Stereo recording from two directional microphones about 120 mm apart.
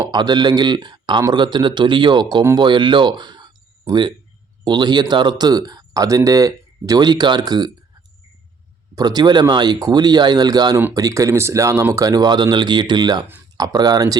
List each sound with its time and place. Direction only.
0.1 s speech: 35° right (ahead or behind)
9.0 s speech: 35° right (ahead or behind)